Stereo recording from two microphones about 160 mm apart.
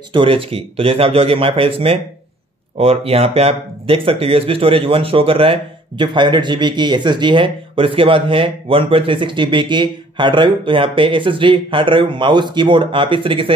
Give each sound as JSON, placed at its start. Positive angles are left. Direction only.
{"t": 0.1, "sound": "speech", "side_deg": -35}